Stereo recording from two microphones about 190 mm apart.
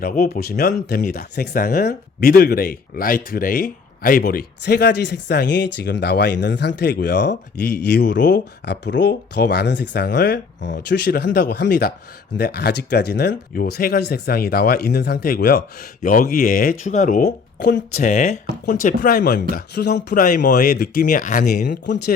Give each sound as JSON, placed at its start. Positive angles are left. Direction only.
{"t": 0.0, "sound": "speech", "side_deg": 45}